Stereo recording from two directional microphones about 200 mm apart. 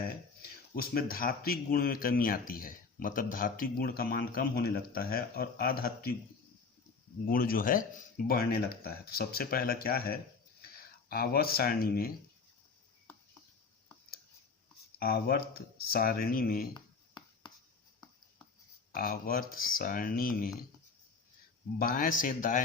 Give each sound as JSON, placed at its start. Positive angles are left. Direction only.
{"t": 0.8, "sound": "speech", "side_deg": 45}
{"t": 7.3, "sound": "speech", "side_deg": 45}
{"t": 14.9, "sound": "speech", "side_deg": 50}
{"t": 18.9, "sound": "speech", "side_deg": 45}
{"t": 21.8, "sound": "speech", "side_deg": 45}